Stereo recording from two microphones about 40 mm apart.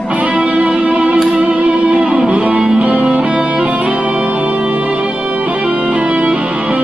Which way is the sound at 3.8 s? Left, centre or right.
Right.